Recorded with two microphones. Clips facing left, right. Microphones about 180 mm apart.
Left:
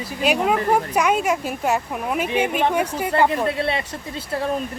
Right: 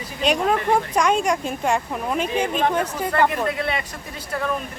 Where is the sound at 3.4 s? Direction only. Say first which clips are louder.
Left 2 dB; 30° left (ahead or behind).